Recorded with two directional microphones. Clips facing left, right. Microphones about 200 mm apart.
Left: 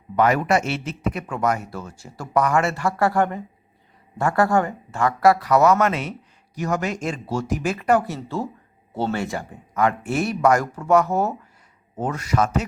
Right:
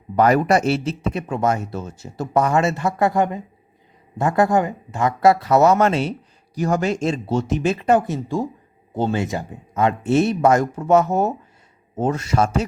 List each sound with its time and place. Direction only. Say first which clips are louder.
0.2 s speech: right 3 dB; 35° right (ahead or behind)